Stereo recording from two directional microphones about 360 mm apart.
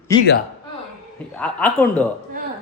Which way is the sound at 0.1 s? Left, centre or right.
Centre.